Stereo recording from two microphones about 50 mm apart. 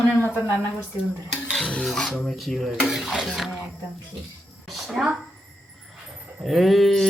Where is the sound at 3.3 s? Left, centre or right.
Centre.